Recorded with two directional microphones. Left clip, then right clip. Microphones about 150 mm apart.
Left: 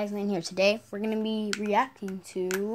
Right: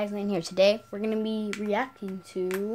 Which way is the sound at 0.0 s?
5° right (ahead or behind).